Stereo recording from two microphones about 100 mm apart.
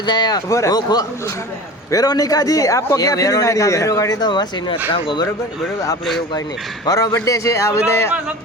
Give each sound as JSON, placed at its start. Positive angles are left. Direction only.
{"t": 0.0, "sound": "a man's voice", "side_deg": 45}
{"t": 4.2, "sound": "speech", "side_deg": 50}
{"t": 4.9, "sound": "speech", "side_deg": 60}
{"t": 6.8, "sound": "a man's voice", "side_deg": 35}